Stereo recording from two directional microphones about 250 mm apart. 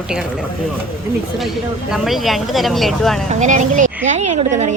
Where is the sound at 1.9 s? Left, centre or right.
Centre.